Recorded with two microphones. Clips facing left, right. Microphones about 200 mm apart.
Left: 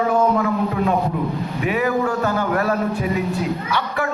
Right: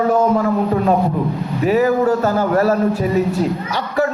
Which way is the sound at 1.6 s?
40° right (ahead or behind).